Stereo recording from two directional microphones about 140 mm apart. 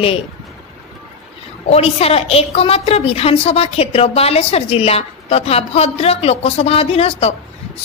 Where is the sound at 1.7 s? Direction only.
45° left (ahead or behind).